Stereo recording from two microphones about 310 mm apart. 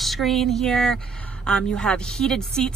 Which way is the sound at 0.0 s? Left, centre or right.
Centre.